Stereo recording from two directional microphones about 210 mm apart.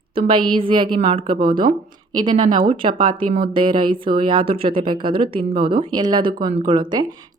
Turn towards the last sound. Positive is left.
turn(degrees=-20)  # may be behind; listen again after turning